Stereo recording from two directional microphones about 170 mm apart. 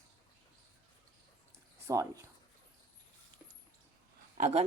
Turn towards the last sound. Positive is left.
turn(degrees=-40)  # may be behind; listen again after turning